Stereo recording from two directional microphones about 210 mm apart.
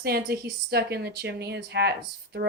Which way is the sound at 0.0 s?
45° right (ahead or behind).